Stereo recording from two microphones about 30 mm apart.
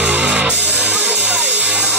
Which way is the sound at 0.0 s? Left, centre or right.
Right.